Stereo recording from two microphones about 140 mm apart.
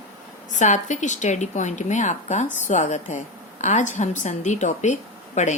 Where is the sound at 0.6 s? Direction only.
60° left (ahead or behind).